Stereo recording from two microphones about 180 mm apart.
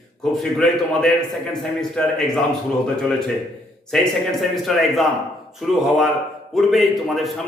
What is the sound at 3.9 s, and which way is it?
A man's voice, centre (ahead or behind).